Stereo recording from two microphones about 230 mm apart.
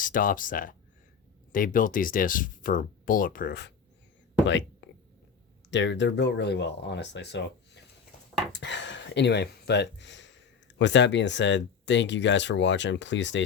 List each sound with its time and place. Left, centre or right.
0.0 s speech: left
4.8 s a sound: left
5.7 s speech: left